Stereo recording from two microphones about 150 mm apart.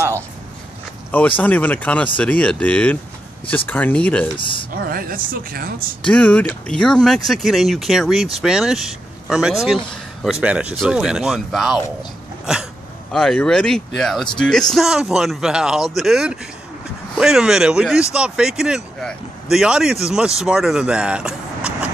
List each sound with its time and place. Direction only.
1.1 s speech: 10° left (ahead or behind)
4.4 s speech: 35° left (ahead or behind)
4.8 s a woman's voice: 75° right (ahead or behind)
6.0 s speech: 10° left (ahead or behind)